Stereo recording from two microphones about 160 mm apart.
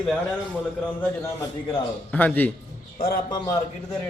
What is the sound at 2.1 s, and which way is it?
Speech, 10° left (ahead or behind).